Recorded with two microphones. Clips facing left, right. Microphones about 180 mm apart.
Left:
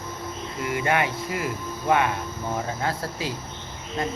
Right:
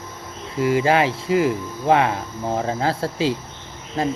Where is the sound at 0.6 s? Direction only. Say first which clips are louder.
Right 7 dB; 30° right (ahead or behind).